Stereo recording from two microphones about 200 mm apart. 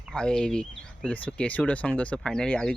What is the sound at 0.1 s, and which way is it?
Speech, 5° left (ahead or behind).